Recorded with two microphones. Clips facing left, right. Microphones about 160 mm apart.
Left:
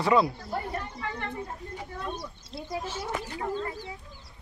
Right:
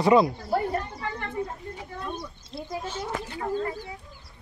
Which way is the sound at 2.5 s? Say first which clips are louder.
Right 1 dB; 5° left (ahead or behind).